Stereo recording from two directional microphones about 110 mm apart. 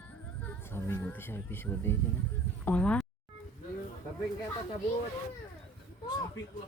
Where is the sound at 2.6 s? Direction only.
10° left (ahead or behind).